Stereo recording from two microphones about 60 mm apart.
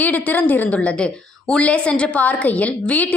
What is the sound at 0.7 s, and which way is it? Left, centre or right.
A woman's voice, centre.